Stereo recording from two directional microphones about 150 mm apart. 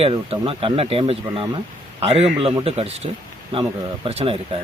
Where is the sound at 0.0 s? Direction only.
40° right (ahead or behind).